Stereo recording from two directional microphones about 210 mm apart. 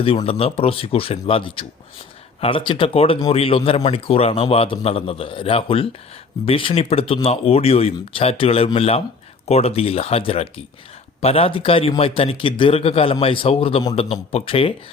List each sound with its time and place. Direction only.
0.0 s speech: 25° left (ahead or behind)